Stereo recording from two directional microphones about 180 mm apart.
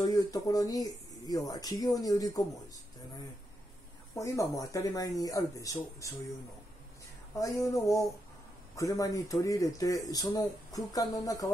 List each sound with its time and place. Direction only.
0.0 s speech: 20° left (ahead or behind)
4.1 s speech: 15° left (ahead or behind)
7.3 s a sound: 20° left (ahead or behind)
8.7 s speech: 20° left (ahead or behind)